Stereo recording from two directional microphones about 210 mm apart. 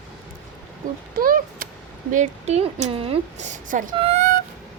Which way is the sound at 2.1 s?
35° right (ahead or behind).